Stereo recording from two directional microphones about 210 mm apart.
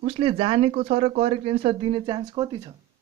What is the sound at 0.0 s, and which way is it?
Speech, 30° right (ahead or behind).